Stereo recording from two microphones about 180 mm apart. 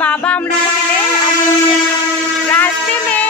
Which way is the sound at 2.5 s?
10° left (ahead or behind).